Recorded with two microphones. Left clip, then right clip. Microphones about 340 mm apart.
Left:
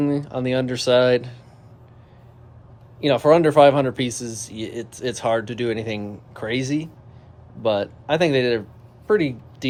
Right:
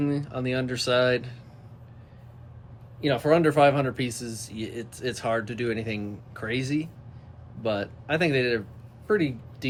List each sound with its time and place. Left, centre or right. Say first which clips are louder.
0.0 s speech: left 6 dB; centre
3.0 s speech: left 6 dB; centre